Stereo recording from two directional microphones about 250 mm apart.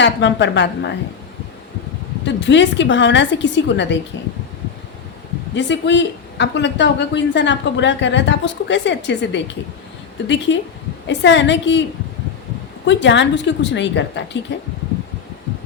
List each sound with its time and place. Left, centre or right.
0.0 s speech: left
2.2 s speech: left
5.5 s speech: left